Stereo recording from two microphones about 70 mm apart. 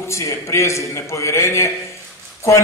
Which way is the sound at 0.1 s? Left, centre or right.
Left.